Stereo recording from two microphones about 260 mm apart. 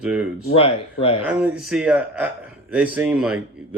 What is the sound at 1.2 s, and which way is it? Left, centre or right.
A man's voice, centre.